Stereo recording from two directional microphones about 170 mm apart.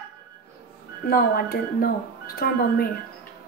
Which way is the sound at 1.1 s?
60° left (ahead or behind).